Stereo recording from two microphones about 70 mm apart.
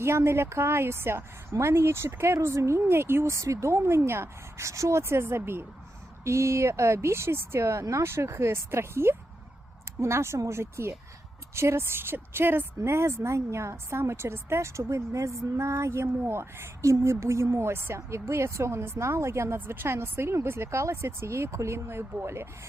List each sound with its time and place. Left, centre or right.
0.0 s a woman's voice: right
3.3 s a woman's voice: right